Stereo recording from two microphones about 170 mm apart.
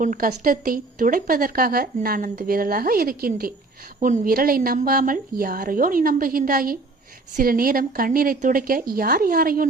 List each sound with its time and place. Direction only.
0.0 s speech: 55° right (ahead or behind)